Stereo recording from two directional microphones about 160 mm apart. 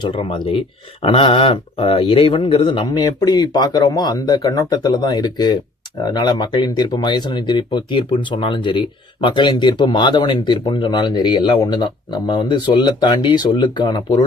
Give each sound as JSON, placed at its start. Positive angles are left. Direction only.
{"t": 0.0, "sound": "a man's voice", "side_deg": 30}